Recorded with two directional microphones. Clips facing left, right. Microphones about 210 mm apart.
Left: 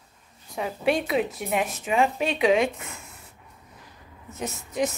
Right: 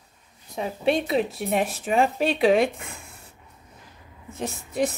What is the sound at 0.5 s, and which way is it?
Speech, 25° right (ahead or behind).